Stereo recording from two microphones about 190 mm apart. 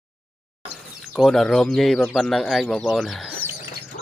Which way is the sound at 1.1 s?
Centre (ahead or behind).